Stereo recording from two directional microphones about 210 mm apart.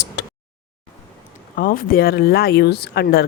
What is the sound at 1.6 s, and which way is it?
Speech, 40° left (ahead or behind).